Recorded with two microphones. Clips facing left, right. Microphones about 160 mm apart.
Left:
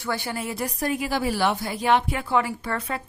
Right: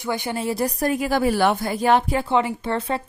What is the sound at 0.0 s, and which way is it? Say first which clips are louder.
Speech: right 4 dB; 20° right (ahead or behind).